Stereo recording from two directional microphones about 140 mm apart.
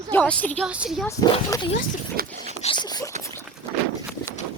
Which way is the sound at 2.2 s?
90° right.